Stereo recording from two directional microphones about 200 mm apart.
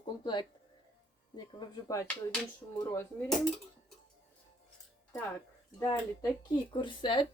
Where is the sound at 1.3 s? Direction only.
20° left (ahead or behind).